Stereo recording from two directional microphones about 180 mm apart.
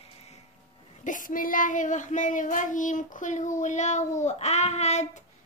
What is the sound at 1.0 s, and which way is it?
Child singing, 45° left (ahead or behind).